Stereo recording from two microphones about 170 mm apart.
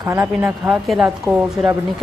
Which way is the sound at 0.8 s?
Centre (ahead or behind).